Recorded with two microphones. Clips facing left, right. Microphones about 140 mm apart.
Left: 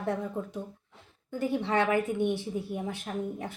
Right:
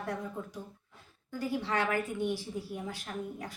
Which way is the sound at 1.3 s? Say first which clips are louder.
Left 4 dB; 25° left (ahead or behind).